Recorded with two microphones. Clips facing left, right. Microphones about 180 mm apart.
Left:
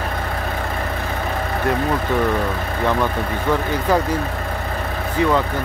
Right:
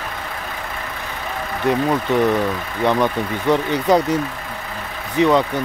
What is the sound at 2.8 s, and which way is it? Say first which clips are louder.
Speech: right 3 dB; 15° right (ahead or behind).